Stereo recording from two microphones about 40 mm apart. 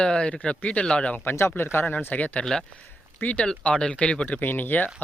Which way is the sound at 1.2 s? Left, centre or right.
Left.